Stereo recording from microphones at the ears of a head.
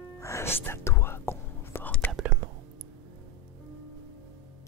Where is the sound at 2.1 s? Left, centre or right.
Right.